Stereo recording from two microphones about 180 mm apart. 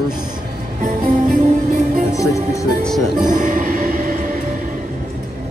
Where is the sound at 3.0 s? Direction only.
45° right (ahead or behind).